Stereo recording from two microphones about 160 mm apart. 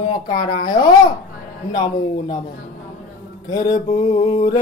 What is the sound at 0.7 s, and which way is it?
Music, 25° left (ahead or behind).